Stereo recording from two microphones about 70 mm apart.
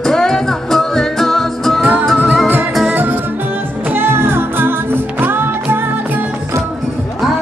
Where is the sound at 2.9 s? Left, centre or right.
Right.